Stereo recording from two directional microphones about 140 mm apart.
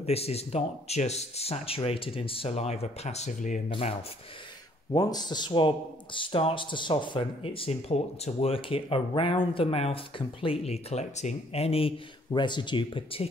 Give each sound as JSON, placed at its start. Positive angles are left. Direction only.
{"t": 0.0, "sound": "speech", "side_deg": 45}
{"t": 3.6, "sound": "speech", "side_deg": 45}
{"t": 4.9, "sound": "speech", "side_deg": 30}
{"t": 12.4, "sound": "speech", "side_deg": 35}